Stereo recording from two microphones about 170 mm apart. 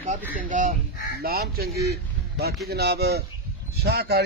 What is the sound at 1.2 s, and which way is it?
Speech, 60° right (ahead or behind).